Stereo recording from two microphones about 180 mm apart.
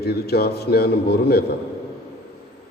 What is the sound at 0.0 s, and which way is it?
A man's voice, 60° left (ahead or behind).